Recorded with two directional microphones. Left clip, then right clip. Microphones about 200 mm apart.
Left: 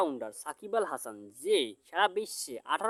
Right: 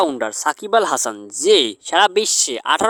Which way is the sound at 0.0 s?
45° right (ahead or behind).